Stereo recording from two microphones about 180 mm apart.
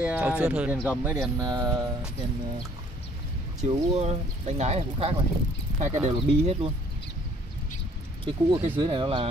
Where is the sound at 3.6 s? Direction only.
40° right (ahead or behind).